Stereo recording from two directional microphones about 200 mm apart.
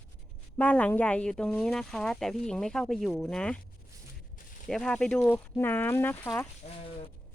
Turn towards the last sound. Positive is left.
turn(degrees=35)  # may be behind; listen again after turning